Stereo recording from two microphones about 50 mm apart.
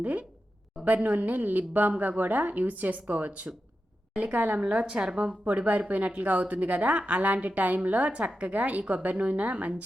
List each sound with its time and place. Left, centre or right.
0.0 s a woman's voice: right